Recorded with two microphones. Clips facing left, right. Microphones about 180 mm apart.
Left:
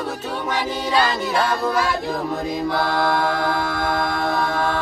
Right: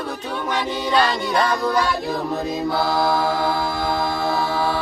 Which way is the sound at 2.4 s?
25° right (ahead or behind).